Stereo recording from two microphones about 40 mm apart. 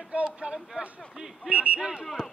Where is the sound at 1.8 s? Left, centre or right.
Centre.